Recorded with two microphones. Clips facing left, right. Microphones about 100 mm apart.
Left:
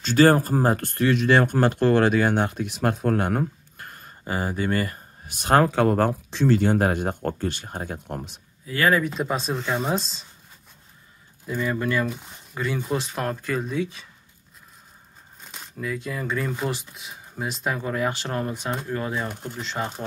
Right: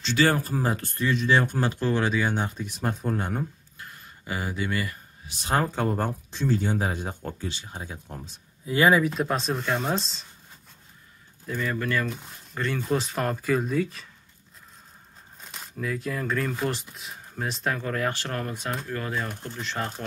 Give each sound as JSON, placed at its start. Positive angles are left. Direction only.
{"t": 0.0, "sound": "speech", "side_deg": 45}
{"t": 8.6, "sound": "speech", "side_deg": -20}
{"t": 9.0, "sound": "speech", "side_deg": 0}
{"t": 11.4, "sound": "speech", "side_deg": 15}
{"t": 12.1, "sound": "speech", "side_deg": 5}
{"t": 15.4, "sound": "speech", "side_deg": 0}